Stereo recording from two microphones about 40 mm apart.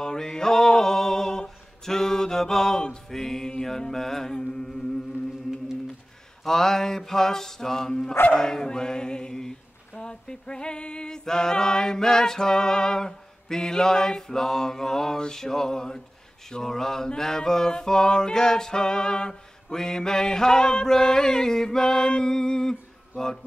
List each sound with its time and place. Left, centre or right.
0.0 s a sound: centre
3.1 s chant: centre
6.4 s chant: centre